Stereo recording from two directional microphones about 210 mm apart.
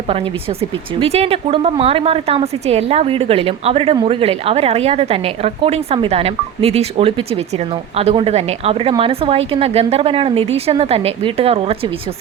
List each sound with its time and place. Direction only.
0.1 s a woman's voice: 25° right (ahead or behind)